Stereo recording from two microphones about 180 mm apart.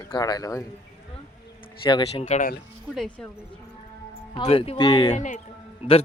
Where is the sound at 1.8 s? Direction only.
30° left (ahead or behind).